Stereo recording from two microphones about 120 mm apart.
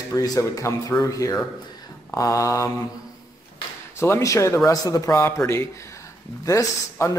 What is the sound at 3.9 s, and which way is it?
Speech, 20° left (ahead or behind).